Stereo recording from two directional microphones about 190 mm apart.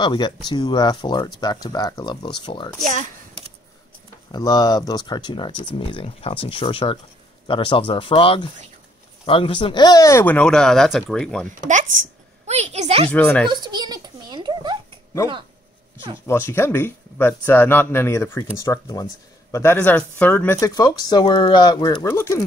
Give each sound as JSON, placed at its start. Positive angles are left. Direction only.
{"t": 0.0, "sound": "speech", "side_deg": 25}
{"t": 2.8, "sound": "chop", "side_deg": -40}
{"t": 4.3, "sound": "speech", "side_deg": 20}
{"t": 11.6, "sound": "speech", "side_deg": -40}
{"t": 12.4, "sound": "a sound", "side_deg": -35}
{"t": 13.1, "sound": "speech", "side_deg": 10}
{"t": 13.5, "sound": "a sound", "side_deg": -20}
{"t": 16.3, "sound": "speech", "side_deg": 15}
{"t": 20.6, "sound": "speech", "side_deg": 20}